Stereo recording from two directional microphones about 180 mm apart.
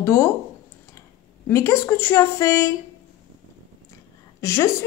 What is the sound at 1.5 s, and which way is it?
A woman's voice, 15° left (ahead or behind).